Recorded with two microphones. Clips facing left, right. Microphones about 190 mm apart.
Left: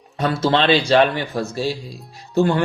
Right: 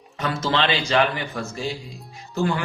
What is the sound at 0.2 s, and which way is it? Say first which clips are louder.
Speech: left 5 dB; 35° left (ahead or behind).